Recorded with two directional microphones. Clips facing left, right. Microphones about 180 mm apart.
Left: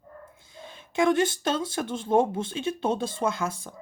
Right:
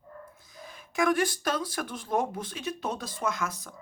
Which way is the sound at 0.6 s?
25° left (ahead or behind).